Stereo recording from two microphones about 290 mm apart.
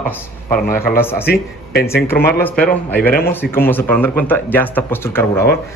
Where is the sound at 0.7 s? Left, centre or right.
Centre.